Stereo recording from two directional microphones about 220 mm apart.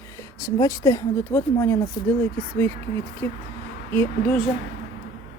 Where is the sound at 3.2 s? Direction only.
10° left (ahead or behind).